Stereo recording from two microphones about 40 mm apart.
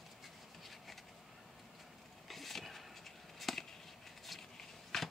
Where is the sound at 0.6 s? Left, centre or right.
Centre.